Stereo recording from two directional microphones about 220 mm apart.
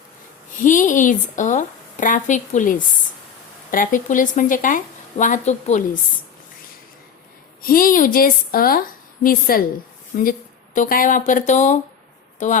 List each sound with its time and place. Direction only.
0.6 s speech: 35° left (ahead or behind)
7.6 s speech: 40° left (ahead or behind)